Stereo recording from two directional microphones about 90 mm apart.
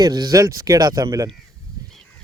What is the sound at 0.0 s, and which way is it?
Speech, 45° right (ahead or behind).